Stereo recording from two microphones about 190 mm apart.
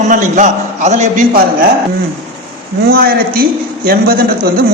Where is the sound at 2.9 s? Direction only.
50° right (ahead or behind).